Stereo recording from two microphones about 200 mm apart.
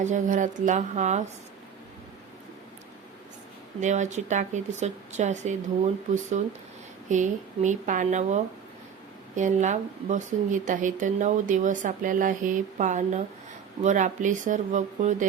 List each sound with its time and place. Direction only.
0.0 s a woman's voice: 40° right (ahead or behind)
3.8 s a woman's voice: 35° right (ahead or behind)
7.1 s a woman's voice: 35° right (ahead or behind)